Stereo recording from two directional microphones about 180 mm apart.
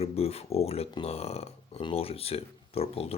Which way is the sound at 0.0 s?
35° left (ahead or behind).